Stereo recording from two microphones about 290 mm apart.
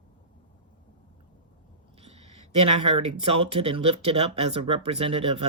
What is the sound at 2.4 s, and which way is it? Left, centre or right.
Speech, right.